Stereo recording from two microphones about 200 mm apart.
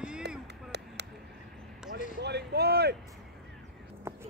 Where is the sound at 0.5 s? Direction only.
55° right (ahead or behind).